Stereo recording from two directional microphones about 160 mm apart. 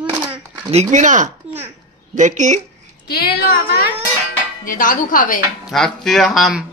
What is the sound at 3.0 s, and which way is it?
Speech, 80° left.